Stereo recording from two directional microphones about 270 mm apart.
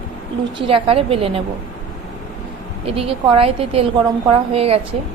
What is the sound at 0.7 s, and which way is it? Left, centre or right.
Speech, right.